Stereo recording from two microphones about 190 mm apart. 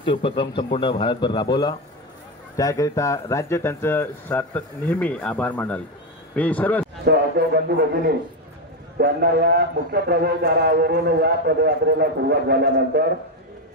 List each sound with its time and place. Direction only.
0.0 s speech: 25° left (ahead or behind); by 6.9 s 5° left (ahead or behind)
7.1 s a man's voice: 60° right (ahead or behind)
8.9 s a man's voice: 60° right (ahead or behind)